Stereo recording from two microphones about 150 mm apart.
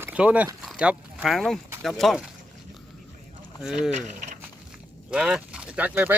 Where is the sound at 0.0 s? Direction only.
10° right (ahead or behind).